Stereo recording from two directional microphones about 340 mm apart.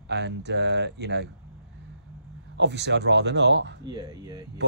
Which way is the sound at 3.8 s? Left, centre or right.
Centre.